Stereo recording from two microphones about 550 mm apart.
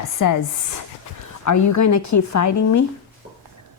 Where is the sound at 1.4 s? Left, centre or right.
Left.